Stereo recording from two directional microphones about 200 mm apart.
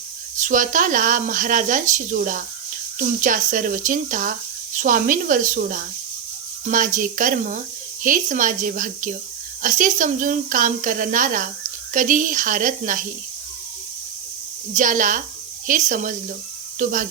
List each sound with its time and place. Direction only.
0.3 s speech: 40° right (ahead or behind)
14.8 s speech: 40° right (ahead or behind)